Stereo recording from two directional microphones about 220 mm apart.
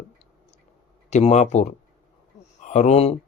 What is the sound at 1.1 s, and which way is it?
Speech, 30° left (ahead or behind).